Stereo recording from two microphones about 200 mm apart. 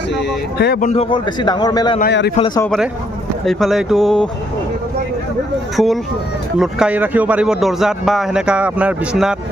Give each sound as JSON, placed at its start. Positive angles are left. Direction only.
{"t": 0.8, "sound": "speech", "side_deg": 35}
{"t": 1.1, "sound": "a man's voice", "side_deg": 20}
{"t": 2.0, "sound": "a man's voice", "side_deg": 55}
{"t": 2.6, "sound": "speech", "side_deg": 0}
{"t": 5.7, "sound": "speech", "side_deg": 0}